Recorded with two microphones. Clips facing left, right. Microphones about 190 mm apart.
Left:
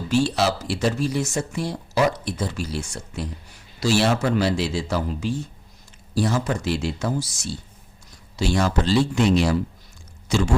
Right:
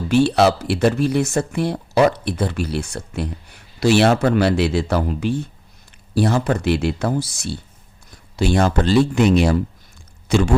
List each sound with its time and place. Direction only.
0.1 s speech: 60° right (ahead or behind)